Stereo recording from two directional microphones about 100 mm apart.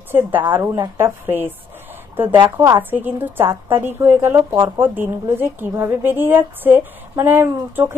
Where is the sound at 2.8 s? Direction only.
20° right (ahead or behind).